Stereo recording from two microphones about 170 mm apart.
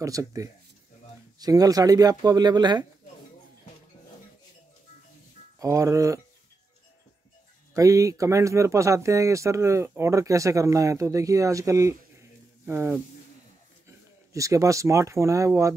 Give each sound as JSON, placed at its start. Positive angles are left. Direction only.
{"t": 0.0, "sound": "speech", "side_deg": -20}
{"t": 5.6, "sound": "speech", "side_deg": -20}
{"t": 7.7, "sound": "speech", "side_deg": -20}
{"t": 14.3, "sound": "speech", "side_deg": -20}